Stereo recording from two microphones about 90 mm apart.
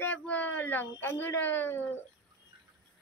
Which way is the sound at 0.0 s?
15° left (ahead or behind).